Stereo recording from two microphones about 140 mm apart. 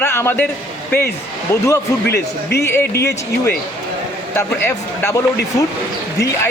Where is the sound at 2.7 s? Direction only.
15° left (ahead or behind).